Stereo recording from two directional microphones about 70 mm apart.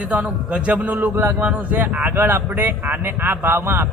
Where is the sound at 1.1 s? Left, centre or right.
Right.